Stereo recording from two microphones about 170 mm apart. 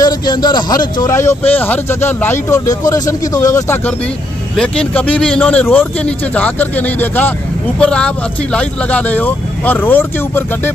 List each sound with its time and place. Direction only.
0.0 s speech: 25° left (ahead or behind)